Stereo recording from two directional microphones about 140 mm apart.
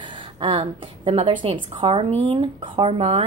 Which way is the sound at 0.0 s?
35° right (ahead or behind).